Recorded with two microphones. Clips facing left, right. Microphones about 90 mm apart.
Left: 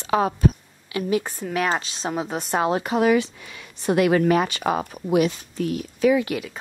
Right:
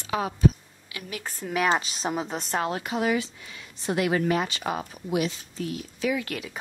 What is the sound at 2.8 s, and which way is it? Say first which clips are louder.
Speech: left 7 dB; 55° left (ahead or behind).